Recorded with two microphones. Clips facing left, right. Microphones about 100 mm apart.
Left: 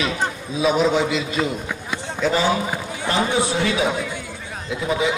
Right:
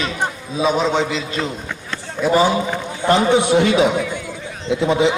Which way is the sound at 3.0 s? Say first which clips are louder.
Right 6 dB; 20° right (ahead or behind).